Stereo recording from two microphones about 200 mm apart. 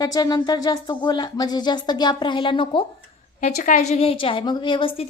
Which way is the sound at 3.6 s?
40° left (ahead or behind).